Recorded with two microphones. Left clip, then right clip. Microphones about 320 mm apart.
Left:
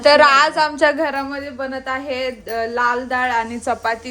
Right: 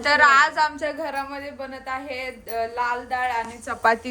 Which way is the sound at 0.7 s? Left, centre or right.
Left.